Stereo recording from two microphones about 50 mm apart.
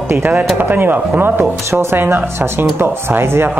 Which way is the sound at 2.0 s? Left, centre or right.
Right.